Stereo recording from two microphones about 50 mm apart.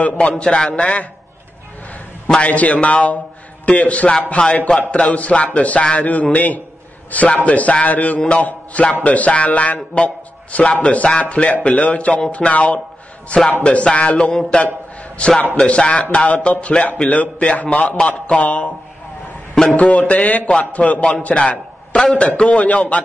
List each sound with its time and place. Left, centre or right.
0.0 s a man's voice: left
2.4 s a man's voice: left
8.4 s mantra: left
9.0 s a man's voice: left
19.7 s a man's voice: left